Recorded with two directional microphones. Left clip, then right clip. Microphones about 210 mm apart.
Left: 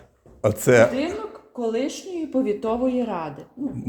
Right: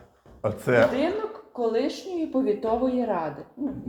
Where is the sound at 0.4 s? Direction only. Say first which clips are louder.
Left 5 dB; 60° left (ahead or behind).